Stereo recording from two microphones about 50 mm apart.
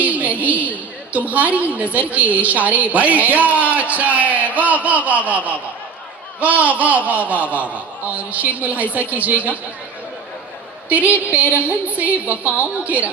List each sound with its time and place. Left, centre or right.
0.0 s a woman's voice: right
10.8 s speech: right